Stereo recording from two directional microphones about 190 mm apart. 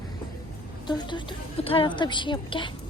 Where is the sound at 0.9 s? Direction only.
25° left (ahead or behind).